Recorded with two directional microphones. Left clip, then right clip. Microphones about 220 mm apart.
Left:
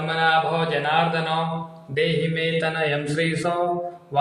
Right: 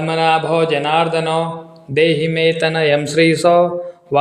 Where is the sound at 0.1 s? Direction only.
40° right (ahead or behind).